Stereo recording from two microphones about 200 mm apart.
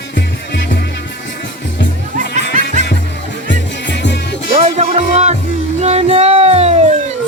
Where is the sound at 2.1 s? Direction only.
40° right (ahead or behind).